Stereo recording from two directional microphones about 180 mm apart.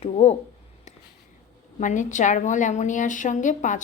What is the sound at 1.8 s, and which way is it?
A woman's voice, 45° left (ahead or behind).